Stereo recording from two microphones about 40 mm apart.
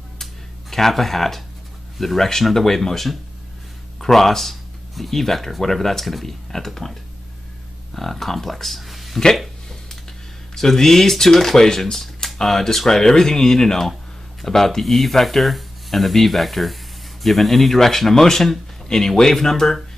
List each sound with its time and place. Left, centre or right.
0.2 s a sound: centre
2.0 s speech: centre
10.5 s speech: centre